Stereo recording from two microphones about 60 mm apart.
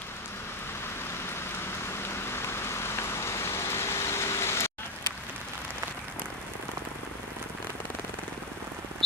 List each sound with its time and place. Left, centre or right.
2.3 s vehicle: left